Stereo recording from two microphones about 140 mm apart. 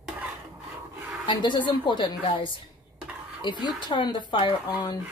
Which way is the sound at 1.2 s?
35° left (ahead or behind).